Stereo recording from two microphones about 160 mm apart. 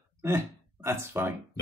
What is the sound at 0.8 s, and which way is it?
Speech, 15° right (ahead or behind).